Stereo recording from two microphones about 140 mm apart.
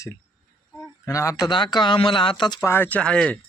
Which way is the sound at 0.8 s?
20° left (ahead or behind).